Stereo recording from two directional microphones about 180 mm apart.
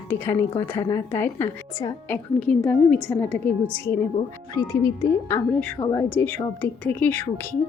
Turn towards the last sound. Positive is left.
turn(degrees=10)  # may be behind; listen again after turning